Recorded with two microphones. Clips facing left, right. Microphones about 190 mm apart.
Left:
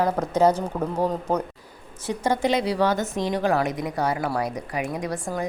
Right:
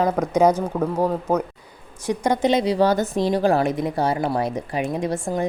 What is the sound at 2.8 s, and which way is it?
A woman's voice, 35° right (ahead or behind).